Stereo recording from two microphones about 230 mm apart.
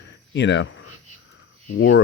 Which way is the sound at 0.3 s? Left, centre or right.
Left.